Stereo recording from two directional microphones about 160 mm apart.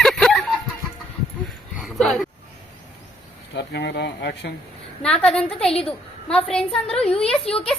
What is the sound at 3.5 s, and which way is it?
Speech, 90° left.